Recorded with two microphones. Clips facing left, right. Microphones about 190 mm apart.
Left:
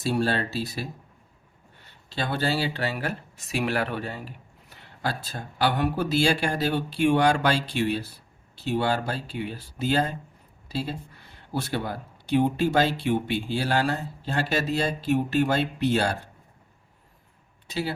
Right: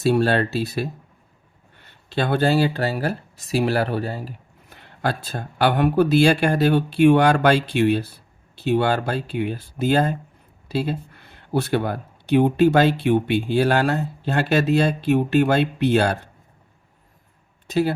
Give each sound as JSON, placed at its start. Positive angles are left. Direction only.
{"t": 0.0, "sound": "speech", "side_deg": -65}
{"t": 2.0, "sound": "speech", "side_deg": -60}
{"t": 4.7, "sound": "speech", "side_deg": -55}
{"t": 17.7, "sound": "speech", "side_deg": -50}